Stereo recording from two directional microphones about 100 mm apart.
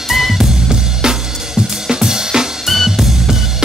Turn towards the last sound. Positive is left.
turn(degrees=-5)  # may be behind; listen again after turning